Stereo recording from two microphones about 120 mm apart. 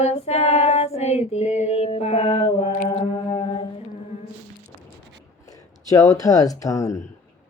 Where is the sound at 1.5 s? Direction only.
65° left (ahead or behind); by 3.6 s 40° left (ahead or behind).